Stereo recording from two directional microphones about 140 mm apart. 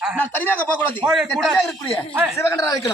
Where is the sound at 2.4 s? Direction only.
20° left (ahead or behind).